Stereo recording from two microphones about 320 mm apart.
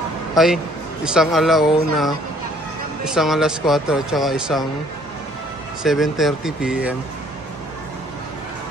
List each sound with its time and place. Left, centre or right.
0.4 s speech: centre
5.9 s speech: centre